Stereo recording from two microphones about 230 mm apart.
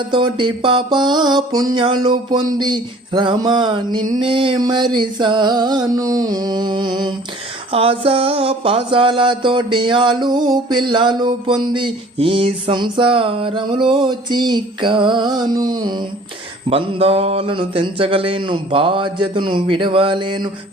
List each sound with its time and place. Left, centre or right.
0.1 s music: right